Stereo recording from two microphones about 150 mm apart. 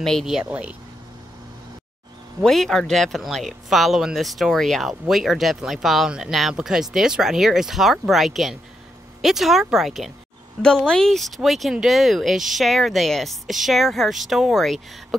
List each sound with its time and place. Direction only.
0.0 s speech: centre (ahead or behind)
2.4 s speech: 5° left (ahead or behind)